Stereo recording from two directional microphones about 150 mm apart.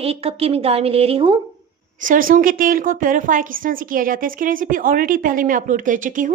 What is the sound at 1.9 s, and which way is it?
A woman's voice, 65° right (ahead or behind).